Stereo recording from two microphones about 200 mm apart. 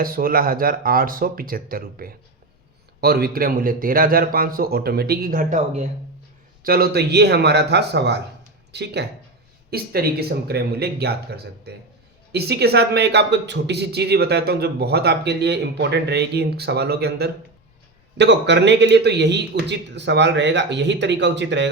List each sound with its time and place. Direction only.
0.0 s a man's voice: 45° right (ahead or behind)
6.6 s a man's voice: 50° right (ahead or behind)